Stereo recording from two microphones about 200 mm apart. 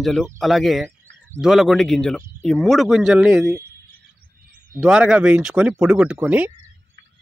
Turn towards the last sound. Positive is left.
turn(degrees=-10)  # may be behind; listen again after turning